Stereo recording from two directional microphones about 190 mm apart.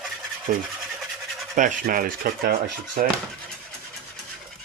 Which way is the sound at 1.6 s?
40° right (ahead or behind).